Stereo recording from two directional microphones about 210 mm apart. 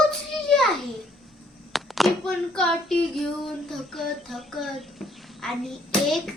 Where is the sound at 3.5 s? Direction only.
Centre (ahead or behind).